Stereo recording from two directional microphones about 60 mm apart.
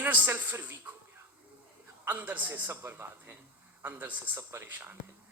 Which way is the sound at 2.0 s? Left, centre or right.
Right.